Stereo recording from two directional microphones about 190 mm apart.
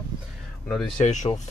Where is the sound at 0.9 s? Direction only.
40° left (ahead or behind).